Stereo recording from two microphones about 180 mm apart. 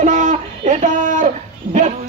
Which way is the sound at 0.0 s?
45° right (ahead or behind).